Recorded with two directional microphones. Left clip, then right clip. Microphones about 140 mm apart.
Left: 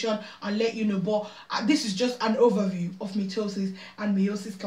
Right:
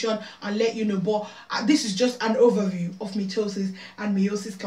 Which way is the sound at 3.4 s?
Centre (ahead or behind).